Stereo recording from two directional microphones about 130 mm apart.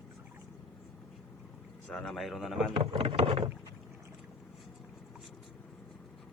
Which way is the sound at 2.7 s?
45° right (ahead or behind).